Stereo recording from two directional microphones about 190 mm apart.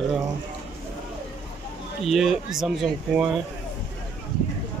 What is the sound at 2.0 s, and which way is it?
Speech, centre (ahead or behind).